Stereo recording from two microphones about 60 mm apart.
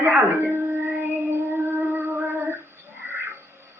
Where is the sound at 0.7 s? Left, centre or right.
Right.